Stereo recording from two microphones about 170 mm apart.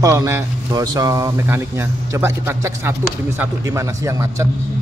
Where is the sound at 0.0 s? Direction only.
20° right (ahead or behind).